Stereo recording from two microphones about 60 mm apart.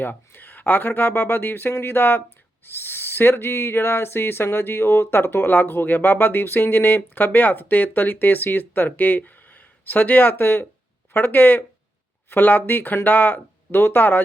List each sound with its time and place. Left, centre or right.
0.0 s owl: left